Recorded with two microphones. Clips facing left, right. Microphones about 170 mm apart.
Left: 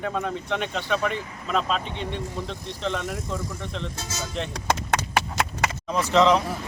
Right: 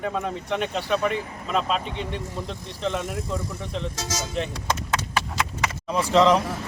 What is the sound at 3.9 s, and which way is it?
Speech, 90° right.